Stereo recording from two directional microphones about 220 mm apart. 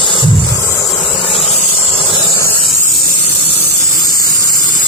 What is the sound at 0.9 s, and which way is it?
Vehicle, 25° left (ahead or behind).